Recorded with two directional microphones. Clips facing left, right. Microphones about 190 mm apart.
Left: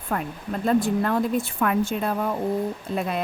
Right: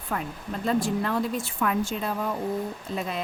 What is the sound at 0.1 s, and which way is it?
A woman's voice, 50° left (ahead or behind).